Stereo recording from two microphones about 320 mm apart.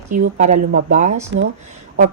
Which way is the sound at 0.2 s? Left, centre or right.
Right.